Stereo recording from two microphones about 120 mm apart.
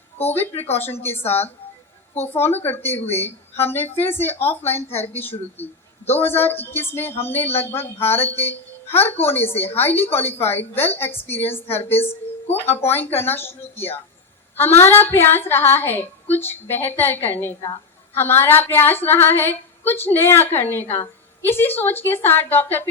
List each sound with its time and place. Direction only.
0.8 s a woman's voice: 15° left (ahead or behind)
7.1 s speech: 60° left (ahead or behind)
7.6 s a woman's voice: 20° left (ahead or behind)